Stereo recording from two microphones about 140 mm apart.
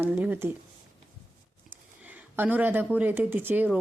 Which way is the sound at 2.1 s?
10° right (ahead or behind).